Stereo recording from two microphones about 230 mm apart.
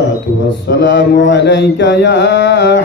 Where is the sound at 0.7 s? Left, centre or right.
Left.